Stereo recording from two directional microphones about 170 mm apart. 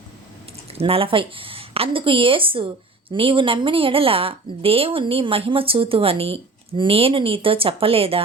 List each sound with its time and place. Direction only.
0.7 s a woman's voice: 35° right (ahead or behind)